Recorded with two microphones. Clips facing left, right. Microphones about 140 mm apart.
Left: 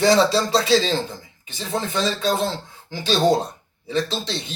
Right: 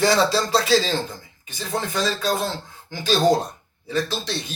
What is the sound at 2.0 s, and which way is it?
Speech, 40° right (ahead or behind).